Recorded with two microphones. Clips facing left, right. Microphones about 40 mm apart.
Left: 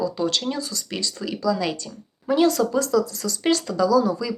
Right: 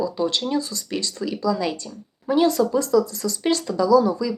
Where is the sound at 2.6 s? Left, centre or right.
Centre.